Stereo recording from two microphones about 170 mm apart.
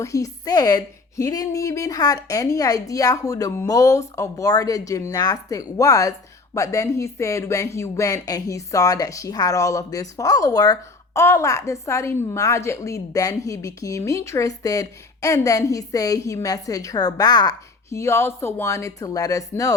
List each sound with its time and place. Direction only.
0.0 s a woman's voice: 20° left (ahead or behind)